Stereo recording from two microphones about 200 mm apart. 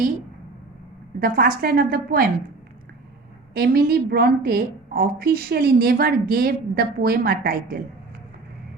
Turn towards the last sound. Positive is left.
turn(degrees=-50)  # may be behind; listen again after turning